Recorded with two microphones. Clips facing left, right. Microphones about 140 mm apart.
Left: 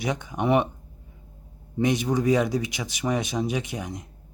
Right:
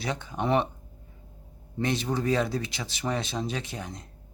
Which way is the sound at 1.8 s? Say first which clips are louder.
Left 5 dB; 15° left (ahead or behind).